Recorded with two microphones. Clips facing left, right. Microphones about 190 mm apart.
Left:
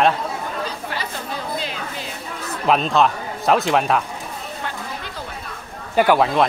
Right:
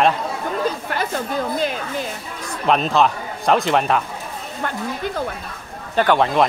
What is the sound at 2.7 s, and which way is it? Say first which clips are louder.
A man's voice: even; centre (ahead or behind).